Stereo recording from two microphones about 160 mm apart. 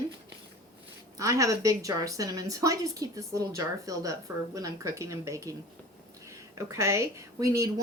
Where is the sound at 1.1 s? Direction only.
20° right (ahead or behind).